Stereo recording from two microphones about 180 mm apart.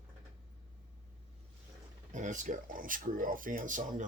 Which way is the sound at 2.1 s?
45° right (ahead or behind).